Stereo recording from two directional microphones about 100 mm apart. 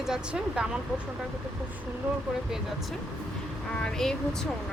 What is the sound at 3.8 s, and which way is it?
Speech, 5° left (ahead or behind).